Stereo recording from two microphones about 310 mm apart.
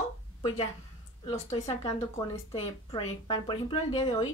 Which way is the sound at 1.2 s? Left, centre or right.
Centre.